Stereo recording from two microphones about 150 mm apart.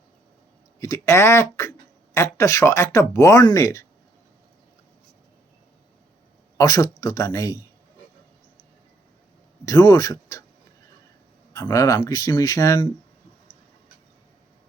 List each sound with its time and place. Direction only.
0.8 s speech: 20° left (ahead or behind)
6.6 s speech: 25° left (ahead or behind)
9.6 s speech: 25° left (ahead or behind)
11.5 s speech: 20° left (ahead or behind)